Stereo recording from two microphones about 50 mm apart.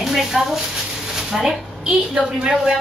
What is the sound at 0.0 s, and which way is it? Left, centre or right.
Speech, centre.